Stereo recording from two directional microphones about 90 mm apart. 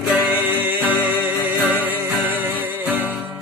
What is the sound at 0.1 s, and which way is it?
Music, 20° right (ahead or behind).